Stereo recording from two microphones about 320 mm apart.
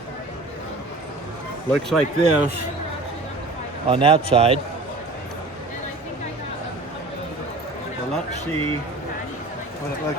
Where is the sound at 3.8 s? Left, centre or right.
Centre.